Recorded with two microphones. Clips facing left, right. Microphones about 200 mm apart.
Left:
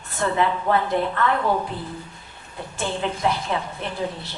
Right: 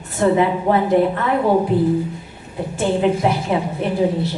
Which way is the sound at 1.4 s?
30° right (ahead or behind).